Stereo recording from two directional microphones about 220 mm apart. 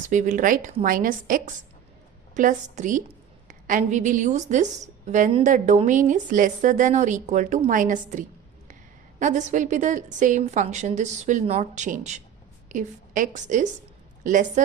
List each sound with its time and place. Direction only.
0.0 s a woman's voice: 35° right (ahead or behind)